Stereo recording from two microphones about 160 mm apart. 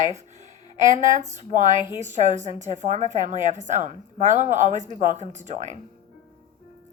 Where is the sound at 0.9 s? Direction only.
45° right (ahead or behind).